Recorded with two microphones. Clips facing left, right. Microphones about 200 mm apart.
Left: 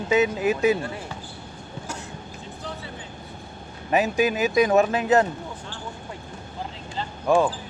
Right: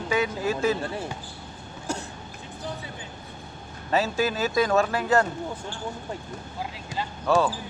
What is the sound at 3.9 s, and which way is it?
Speech, 15° left (ahead or behind).